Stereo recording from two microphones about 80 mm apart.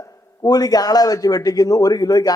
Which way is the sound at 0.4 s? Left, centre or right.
Left.